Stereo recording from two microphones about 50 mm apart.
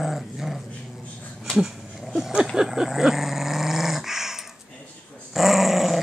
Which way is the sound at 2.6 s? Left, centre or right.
Centre.